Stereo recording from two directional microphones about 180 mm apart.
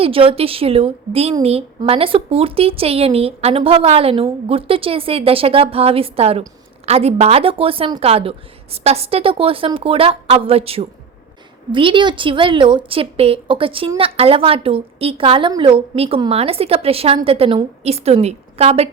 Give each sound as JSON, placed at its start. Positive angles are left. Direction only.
{"t": 0.0, "sound": "a woman's voice", "side_deg": -30}